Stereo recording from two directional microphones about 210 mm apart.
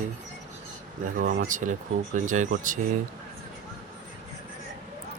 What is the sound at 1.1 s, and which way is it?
Speech, 40° right (ahead or behind).